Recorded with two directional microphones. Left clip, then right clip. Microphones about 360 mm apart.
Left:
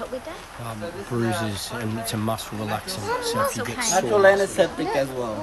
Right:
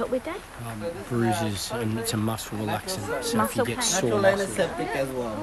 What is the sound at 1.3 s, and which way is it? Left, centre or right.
Speech, centre.